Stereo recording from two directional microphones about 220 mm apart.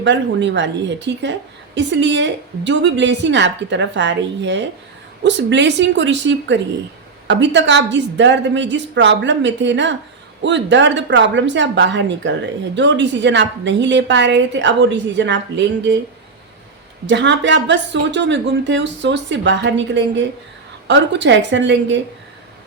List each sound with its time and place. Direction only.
0.0 s a woman's voice: 55° right (ahead or behind)
17.1 s a woman's voice: 55° right (ahead or behind)